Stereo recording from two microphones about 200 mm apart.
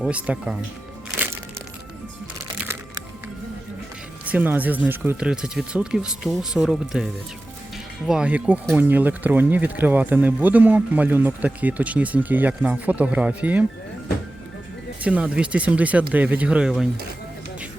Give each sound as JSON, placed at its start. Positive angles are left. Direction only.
{"t": 0.0, "sound": "speech", "side_deg": -5}
{"t": 4.3, "sound": "speech", "side_deg": -10}
{"t": 15.0, "sound": "speech", "side_deg": -5}